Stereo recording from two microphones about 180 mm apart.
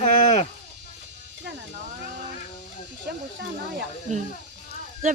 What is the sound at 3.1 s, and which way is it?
Speech, 65° right (ahead or behind).